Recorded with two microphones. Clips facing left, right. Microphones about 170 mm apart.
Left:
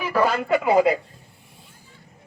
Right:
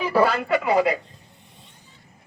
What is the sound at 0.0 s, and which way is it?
Radio, 10° right (ahead or behind).